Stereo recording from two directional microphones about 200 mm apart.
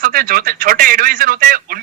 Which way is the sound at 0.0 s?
45° right (ahead or behind).